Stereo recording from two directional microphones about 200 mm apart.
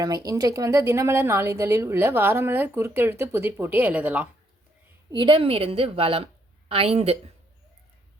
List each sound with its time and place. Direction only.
0.0 s a woman's voice: 20° right (ahead or behind)
5.1 s a woman's voice: 25° right (ahead or behind)